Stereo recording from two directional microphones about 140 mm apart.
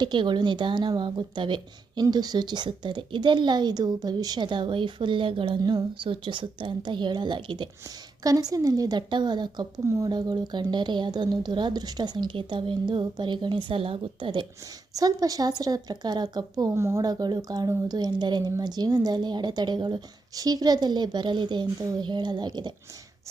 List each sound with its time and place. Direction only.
0.0 s a woman's voice: 35° right (ahead or behind)
14.9 s speech: 25° right (ahead or behind)